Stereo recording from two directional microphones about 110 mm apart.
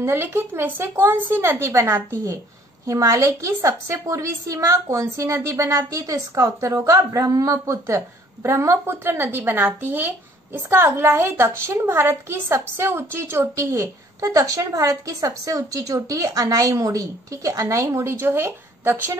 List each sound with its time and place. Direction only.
0.0 s a woman's voice: 20° right (ahead or behind)